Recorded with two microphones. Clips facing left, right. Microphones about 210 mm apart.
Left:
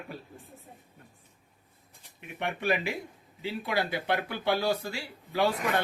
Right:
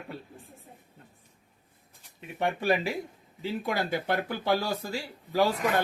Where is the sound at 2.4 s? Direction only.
35° right (ahead or behind).